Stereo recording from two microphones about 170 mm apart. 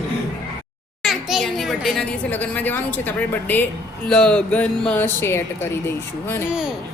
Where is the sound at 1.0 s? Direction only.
Centre (ahead or behind).